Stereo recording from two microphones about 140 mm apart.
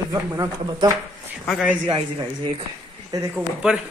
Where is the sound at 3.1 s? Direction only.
20° right (ahead or behind).